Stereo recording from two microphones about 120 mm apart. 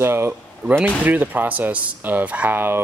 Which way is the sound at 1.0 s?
15° right (ahead or behind).